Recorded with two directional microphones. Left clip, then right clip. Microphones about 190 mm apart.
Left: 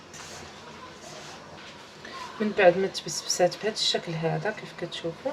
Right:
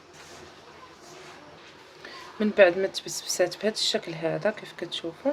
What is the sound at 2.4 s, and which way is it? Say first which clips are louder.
Speech: right 1 dB; 60° right (ahead or behind).